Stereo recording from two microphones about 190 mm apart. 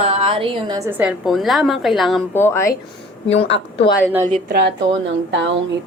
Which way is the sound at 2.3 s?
10° left (ahead or behind).